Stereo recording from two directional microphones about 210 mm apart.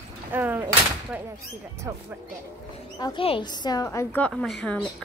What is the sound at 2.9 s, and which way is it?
Speech, 20° left (ahead or behind).